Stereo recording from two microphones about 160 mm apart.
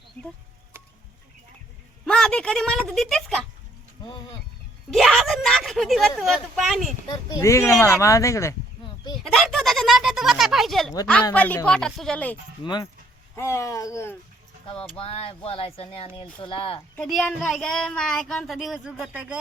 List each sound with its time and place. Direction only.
0.2 s a woman's voice: 15° left (ahead or behind)
2.0 s speech: 5° left (ahead or behind)
4.0 s a sound: 25° left (ahead or behind)
4.9 s speech: centre (ahead or behind)
7.1 s speech: 20° left (ahead or behind)
9.2 s a woman's voice: centre (ahead or behind)
12.6 s speech: 25° left (ahead or behind)
13.3 s a woman's voice: 15° left (ahead or behind)
14.9 s speech: 40° left (ahead or behind)
17.1 s speech: 5° left (ahead or behind)